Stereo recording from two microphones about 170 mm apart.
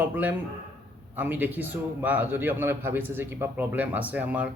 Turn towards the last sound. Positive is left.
turn(degrees=-10)  # may be behind; listen again after turning